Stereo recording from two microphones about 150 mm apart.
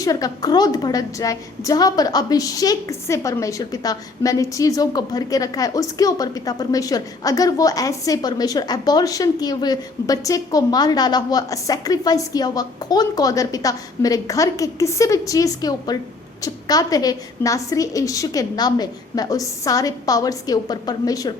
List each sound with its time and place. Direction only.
0.0 s a woman's voice: 25° left (ahead or behind)